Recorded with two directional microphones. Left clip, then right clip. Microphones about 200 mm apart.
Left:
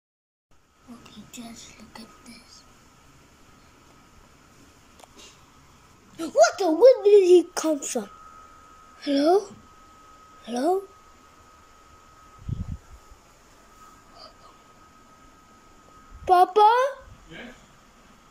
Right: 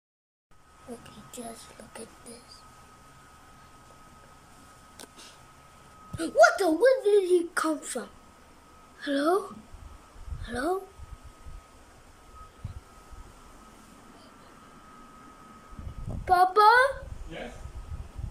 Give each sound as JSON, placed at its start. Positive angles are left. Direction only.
{"t": 6.1, "sound": "a child's voice", "side_deg": 0}
{"t": 6.8, "sound": "a child's voice", "side_deg": 10}
{"t": 10.4, "sound": "a child's voice", "side_deg": 10}
{"t": 16.3, "sound": "a child's voice", "side_deg": 10}